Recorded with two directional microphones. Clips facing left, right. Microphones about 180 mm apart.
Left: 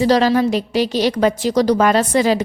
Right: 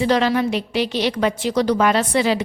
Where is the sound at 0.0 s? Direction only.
40° left (ahead or behind).